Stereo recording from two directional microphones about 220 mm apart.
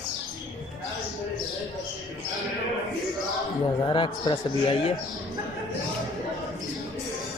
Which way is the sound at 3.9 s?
20° left (ahead or behind).